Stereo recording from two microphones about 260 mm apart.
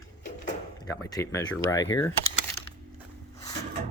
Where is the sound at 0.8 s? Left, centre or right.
Centre.